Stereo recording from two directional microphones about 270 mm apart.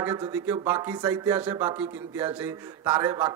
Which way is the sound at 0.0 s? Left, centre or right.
Centre.